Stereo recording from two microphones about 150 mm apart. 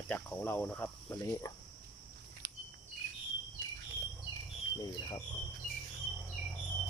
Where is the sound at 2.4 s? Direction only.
65° right (ahead or behind).